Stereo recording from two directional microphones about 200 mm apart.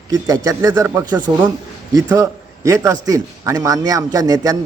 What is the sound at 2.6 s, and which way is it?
A man's voice, 15° right (ahead or behind).